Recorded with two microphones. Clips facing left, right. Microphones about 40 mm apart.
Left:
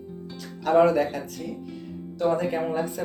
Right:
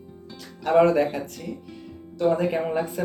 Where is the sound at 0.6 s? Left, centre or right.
Centre.